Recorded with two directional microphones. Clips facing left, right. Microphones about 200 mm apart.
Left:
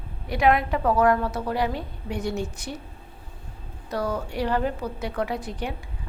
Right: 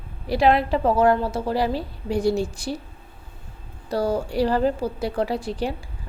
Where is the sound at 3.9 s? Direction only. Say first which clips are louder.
Right 5 dB; 30° right (ahead or behind).